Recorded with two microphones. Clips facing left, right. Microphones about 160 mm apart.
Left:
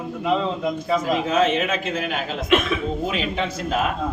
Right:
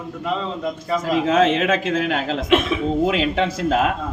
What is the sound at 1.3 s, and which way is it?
Speech, 90° right.